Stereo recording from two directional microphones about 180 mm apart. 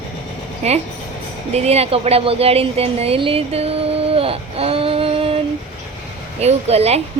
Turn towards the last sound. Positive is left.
turn(degrees=-35)  # may be behind; listen again after turning